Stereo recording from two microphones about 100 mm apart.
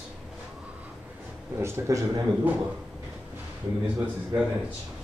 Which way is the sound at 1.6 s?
30° right (ahead or behind).